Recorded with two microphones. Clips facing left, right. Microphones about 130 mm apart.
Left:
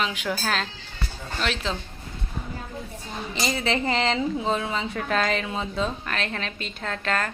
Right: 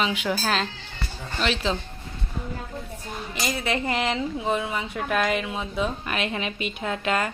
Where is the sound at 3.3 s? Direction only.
10° right (ahead or behind).